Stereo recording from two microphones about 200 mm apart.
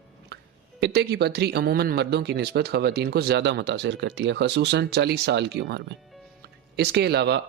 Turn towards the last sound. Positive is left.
turn(degrees=-55)  # may be behind; listen again after turning